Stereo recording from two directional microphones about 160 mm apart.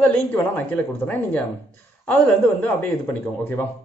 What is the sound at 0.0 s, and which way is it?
Speech, 10° left (ahead or behind).